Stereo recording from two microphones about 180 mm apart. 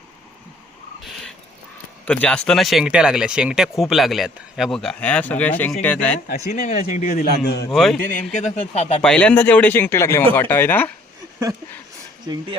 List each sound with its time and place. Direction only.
2.0 s speech: 5° left (ahead or behind)
6.5 s speech: 45° left (ahead or behind); by 7.7 s 60° left (ahead or behind)
7.7 s speech: centre (ahead or behind)
7.9 s speech: 50° left (ahead or behind)
9.0 s speech: 5° left (ahead or behind)